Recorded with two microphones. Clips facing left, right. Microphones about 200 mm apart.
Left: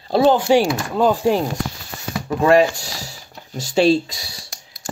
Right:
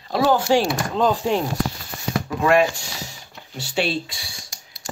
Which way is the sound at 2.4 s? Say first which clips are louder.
Left 4 dB; 35° left (ahead or behind).